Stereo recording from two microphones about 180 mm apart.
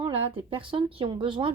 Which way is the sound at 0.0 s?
30° right (ahead or behind).